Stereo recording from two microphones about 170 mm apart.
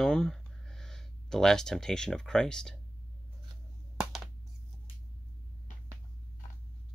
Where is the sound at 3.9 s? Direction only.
Centre (ahead or behind).